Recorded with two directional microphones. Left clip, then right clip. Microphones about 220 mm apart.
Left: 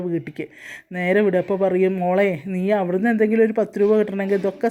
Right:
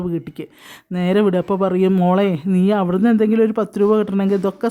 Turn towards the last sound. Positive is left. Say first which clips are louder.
# right 1 dB
turn(degrees=-15)  # may be behind; listen again after turning